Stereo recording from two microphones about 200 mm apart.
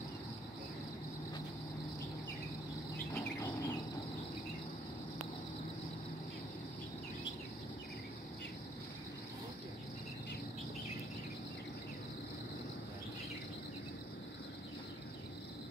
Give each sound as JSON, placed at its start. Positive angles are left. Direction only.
{"t": 3.2, "sound": "bird", "side_deg": 15}